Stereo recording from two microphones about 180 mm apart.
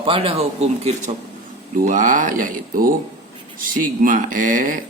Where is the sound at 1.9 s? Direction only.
45° right (ahead or behind).